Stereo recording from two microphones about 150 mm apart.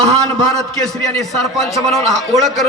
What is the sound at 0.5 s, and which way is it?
A man's voice, centre (ahead or behind).